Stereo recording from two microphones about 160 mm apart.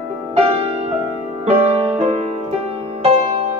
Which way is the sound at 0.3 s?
40° right (ahead or behind).